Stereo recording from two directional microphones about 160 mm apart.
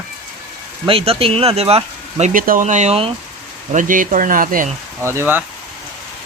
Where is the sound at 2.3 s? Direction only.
55° right (ahead or behind).